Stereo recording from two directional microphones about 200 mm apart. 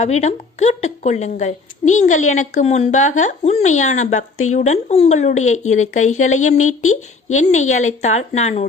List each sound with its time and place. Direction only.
0.0 s a woman's voice: 35° left (ahead or behind)